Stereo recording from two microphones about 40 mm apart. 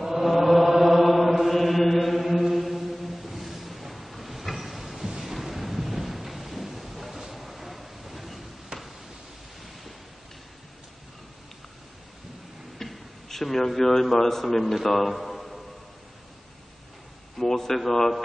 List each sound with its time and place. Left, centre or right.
0.0 s chant: centre
5.2 s thunder: centre
12.7 s speech: centre
17.4 s a sound: centre